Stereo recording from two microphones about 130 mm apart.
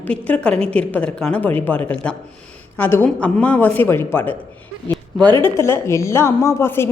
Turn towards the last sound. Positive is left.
turn(degrees=20)  # may be behind; listen again after turning